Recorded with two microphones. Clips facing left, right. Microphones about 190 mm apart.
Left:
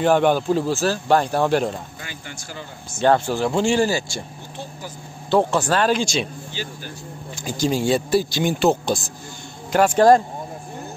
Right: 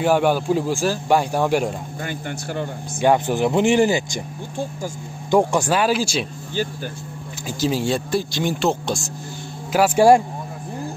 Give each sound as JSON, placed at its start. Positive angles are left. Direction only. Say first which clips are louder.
{"t": 0.0, "sound": "speech", "louder": "left 1 dB", "side_deg": -10}
{"t": 2.0, "sound": "speech", "louder": "right 8 dB", "side_deg": -55}
{"t": 3.0, "sound": "speech", "louder": "right 1 dB", "side_deg": -15}
{"t": 5.3, "sound": "speech", "louder": "right 1 dB", "side_deg": -15}
{"t": 7.4, "sound": "speech", "louder": "left 1 dB", "side_deg": 0}